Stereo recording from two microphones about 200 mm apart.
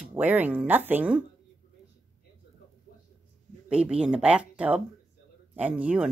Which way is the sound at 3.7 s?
5° right (ahead or behind).